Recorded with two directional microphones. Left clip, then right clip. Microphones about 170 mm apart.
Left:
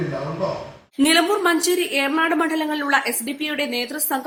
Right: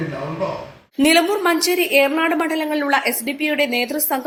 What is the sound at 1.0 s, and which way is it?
A woman's voice, 15° right (ahead or behind).